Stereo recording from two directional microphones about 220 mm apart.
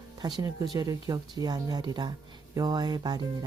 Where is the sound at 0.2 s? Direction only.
20° right (ahead or behind).